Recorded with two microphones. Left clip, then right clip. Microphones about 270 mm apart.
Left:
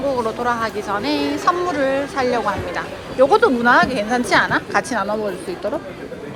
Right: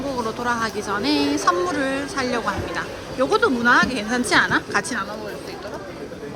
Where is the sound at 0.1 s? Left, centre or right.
Centre.